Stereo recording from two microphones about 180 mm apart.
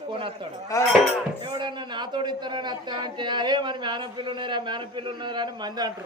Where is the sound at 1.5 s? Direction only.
25° right (ahead or behind).